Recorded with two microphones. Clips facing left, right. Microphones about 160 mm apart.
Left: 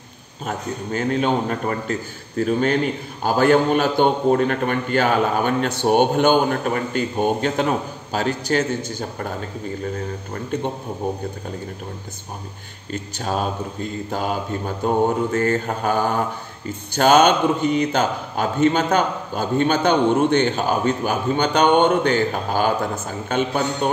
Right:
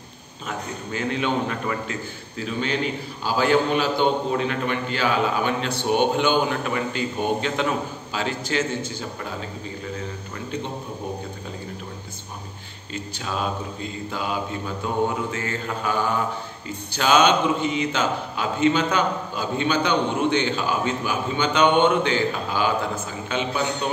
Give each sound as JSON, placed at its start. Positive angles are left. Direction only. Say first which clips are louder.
{"t": 0.5, "sound": "a man's voice", "louder": "left 4 dB", "side_deg": 45}
{"t": 10.3, "sound": "a man's voice", "louder": "left 6 dB", "side_deg": 50}
{"t": 12.9, "sound": "a man's voice", "louder": "left 5 dB", "side_deg": 45}